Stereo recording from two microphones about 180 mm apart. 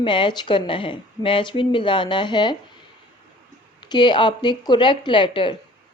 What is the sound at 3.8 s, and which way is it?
Speech, 25° left (ahead or behind).